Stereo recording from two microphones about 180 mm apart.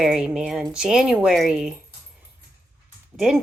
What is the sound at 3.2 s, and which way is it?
Speech, 5° right (ahead or behind).